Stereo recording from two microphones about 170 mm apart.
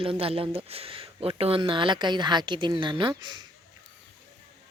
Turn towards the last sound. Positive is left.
turn(degrees=-25)  # may be behind; listen again after turning